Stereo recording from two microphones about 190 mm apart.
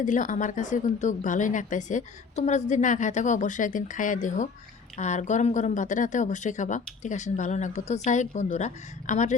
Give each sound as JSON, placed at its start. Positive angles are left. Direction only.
{"t": 0.0, "sound": "a woman's voice", "side_deg": 40}